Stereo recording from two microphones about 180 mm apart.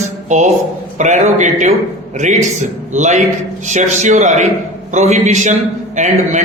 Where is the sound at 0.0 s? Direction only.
40° right (ahead or behind).